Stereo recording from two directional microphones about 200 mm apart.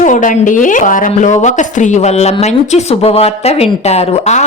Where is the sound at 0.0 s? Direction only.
40° left (ahead or behind).